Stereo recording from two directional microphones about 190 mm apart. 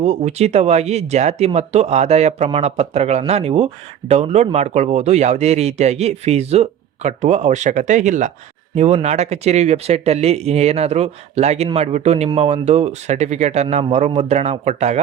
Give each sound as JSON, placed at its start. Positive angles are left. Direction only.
{"t": 0.0, "sound": "speech", "side_deg": -35}